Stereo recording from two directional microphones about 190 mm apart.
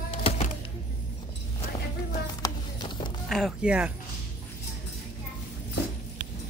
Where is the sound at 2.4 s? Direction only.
20° left (ahead or behind).